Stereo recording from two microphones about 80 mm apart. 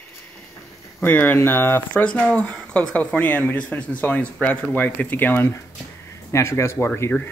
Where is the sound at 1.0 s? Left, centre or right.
Left.